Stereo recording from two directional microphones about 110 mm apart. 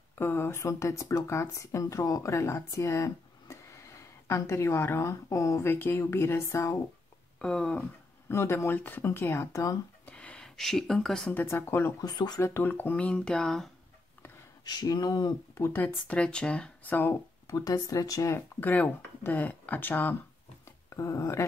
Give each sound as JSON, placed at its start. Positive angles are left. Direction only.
{"t": 0.2, "sound": "speech", "side_deg": 20}
{"t": 7.4, "sound": "speech", "side_deg": 10}
{"t": 8.3, "sound": "speech", "side_deg": 25}
{"t": 10.0, "sound": "speech", "side_deg": 10}
{"t": 11.3, "sound": "speech", "side_deg": 20}
{"t": 12.0, "sound": "speech", "side_deg": 40}
{"t": 12.4, "sound": "speech", "side_deg": 20}
{"t": 14.6, "sound": "speech", "side_deg": 40}
{"t": 15.5, "sound": "speech", "side_deg": 20}
{"t": 16.1, "sound": "speech", "side_deg": 10}
{"t": 17.6, "sound": "speech", "side_deg": 35}
{"t": 18.6, "sound": "speech", "side_deg": 15}
{"t": 20.6, "sound": "a sound", "side_deg": 30}